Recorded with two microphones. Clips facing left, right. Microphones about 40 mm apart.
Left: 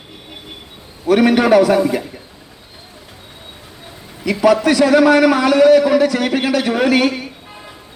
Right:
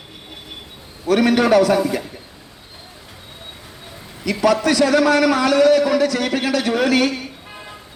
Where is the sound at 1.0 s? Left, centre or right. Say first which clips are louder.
Left 3 dB; centre.